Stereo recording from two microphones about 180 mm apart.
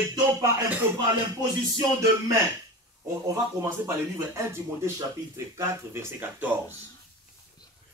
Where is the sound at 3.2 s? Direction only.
20° right (ahead or behind).